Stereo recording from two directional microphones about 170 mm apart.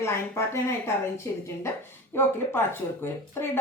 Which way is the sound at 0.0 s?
15° left (ahead or behind).